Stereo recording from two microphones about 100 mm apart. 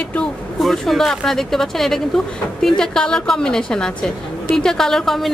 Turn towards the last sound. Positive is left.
turn(degrees=5)  # may be behind; listen again after turning